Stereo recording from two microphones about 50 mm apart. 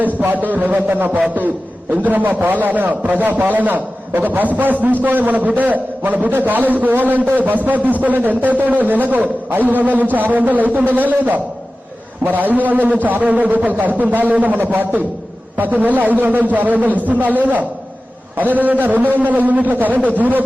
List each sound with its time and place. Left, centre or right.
0.0 s a man's voice: right